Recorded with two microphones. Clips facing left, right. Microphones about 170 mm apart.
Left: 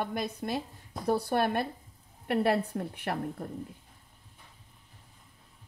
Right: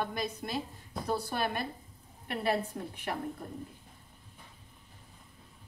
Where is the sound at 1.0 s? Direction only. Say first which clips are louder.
Left 6 dB; 60° left (ahead or behind).